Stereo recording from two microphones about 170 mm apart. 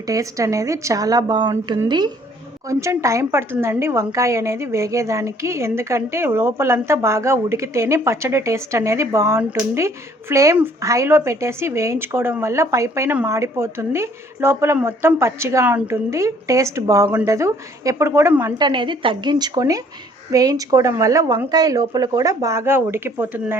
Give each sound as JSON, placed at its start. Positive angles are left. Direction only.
{"t": 0.1, "sound": "a woman's voice", "side_deg": -20}